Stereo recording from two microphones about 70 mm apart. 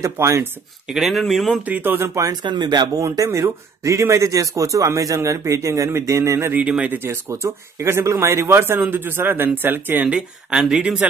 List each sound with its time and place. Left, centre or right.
0.0 s speech: right
0.8 s speech: centre
1.7 s speech: right
2.4 s speech: right
3.0 s speech: right
6.9 s speech: right
10.0 s speech: centre